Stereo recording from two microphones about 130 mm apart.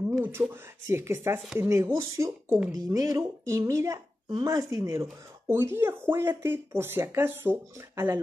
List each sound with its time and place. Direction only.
0.2 s speech: 20° right (ahead or behind)